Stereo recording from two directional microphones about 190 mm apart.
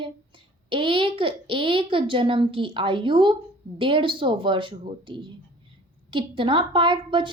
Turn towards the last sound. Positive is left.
turn(degrees=-25)  # may be behind; listen again after turning